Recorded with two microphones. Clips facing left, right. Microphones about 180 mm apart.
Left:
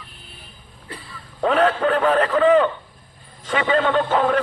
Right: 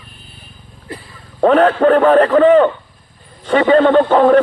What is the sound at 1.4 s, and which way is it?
A man's voice, 40° right (ahead or behind).